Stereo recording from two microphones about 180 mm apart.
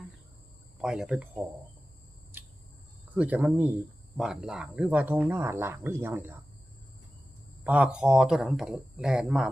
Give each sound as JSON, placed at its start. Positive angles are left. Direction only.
{"t": 0.8, "sound": "speech", "side_deg": -5}
{"t": 2.3, "sound": "cricket", "side_deg": -10}
{"t": 3.2, "sound": "speech", "side_deg": -10}
{"t": 7.6, "sound": "speech", "side_deg": -10}